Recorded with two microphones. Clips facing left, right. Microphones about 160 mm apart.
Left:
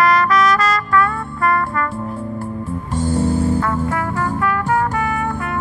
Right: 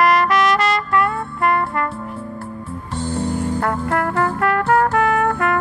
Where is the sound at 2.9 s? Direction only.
10° left (ahead or behind).